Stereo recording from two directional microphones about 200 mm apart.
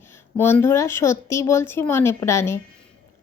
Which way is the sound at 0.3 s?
10° left (ahead or behind).